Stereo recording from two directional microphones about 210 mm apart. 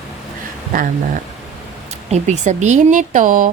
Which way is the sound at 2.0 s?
30° right (ahead or behind).